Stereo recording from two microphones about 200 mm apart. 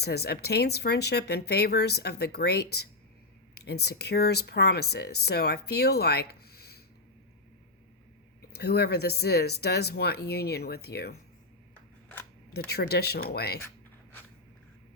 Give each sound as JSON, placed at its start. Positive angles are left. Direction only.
{"t": 0.0, "sound": "speech", "side_deg": 55}
{"t": 8.4, "sound": "speech", "side_deg": 55}
{"t": 12.5, "sound": "speech", "side_deg": 55}